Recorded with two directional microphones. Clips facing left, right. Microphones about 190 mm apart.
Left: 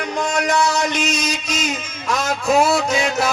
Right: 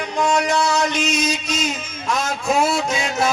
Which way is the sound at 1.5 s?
55° right (ahead or behind).